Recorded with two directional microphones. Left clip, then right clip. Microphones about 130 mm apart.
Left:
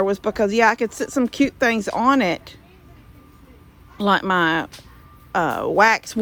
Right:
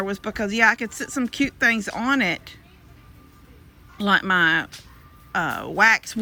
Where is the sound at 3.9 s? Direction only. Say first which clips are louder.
Left 1 dB; 40° left (ahead or behind).